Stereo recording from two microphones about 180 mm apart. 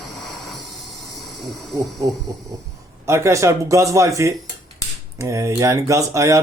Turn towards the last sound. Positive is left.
turn(degrees=-15)  # may be behind; listen again after turning